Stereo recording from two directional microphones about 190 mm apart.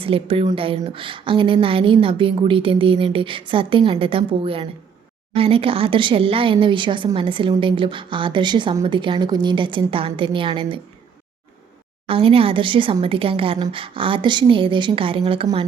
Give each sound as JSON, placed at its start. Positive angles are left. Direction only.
{"t": 0.0, "sound": "speech", "side_deg": -30}
{"t": 12.0, "sound": "speech", "side_deg": -30}